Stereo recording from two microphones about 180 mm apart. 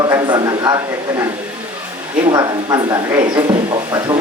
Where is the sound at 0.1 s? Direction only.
20° right (ahead or behind).